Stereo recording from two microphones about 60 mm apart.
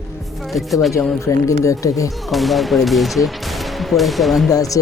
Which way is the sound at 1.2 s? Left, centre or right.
Left.